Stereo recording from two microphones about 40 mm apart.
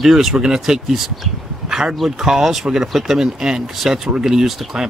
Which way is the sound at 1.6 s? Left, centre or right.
Centre.